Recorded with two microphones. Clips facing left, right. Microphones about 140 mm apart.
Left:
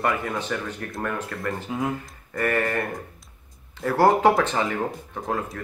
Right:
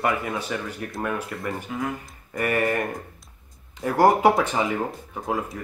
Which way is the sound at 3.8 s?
15° right (ahead or behind).